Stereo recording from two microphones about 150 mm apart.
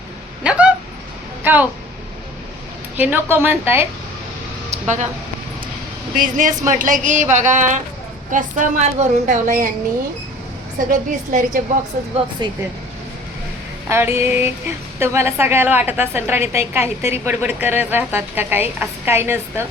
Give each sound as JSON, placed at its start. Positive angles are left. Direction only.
{"t": 0.4, "sound": "a woman's voice", "side_deg": -5}
{"t": 3.0, "sound": "a woman's voice", "side_deg": -15}
{"t": 4.7, "sound": "a sound", "side_deg": -55}
{"t": 6.1, "sound": "a woman's voice", "side_deg": -65}
{"t": 10.8, "sound": "a woman's voice", "side_deg": -60}
{"t": 12.4, "sound": "speech", "side_deg": -30}
{"t": 13.8, "sound": "a woman's voice", "side_deg": -15}